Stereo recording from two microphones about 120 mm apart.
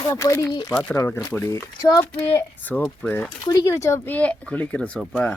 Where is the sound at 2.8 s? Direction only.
10° left (ahead or behind).